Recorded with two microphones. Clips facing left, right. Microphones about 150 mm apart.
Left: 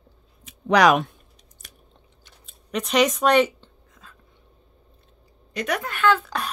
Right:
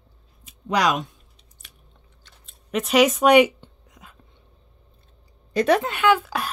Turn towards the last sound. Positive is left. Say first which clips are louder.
# right 1 dB
turn(degrees=-10)  # may be behind; listen again after turning